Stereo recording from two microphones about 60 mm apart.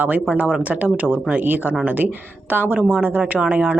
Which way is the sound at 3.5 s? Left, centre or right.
Right.